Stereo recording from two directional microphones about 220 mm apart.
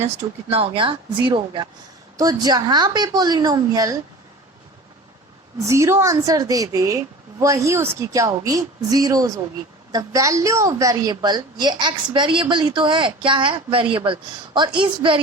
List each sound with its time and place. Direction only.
0.5 s a woman's voice: 25° right (ahead or behind)
5.5 s a woman's voice: 15° right (ahead or behind)